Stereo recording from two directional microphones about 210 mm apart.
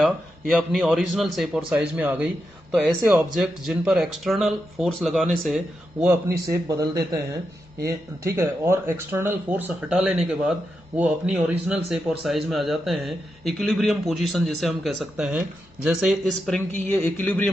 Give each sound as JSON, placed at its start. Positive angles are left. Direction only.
{"t": 0.0, "sound": "a man's voice", "side_deg": 0}
{"t": 6.5, "sound": "a man's voice", "side_deg": -15}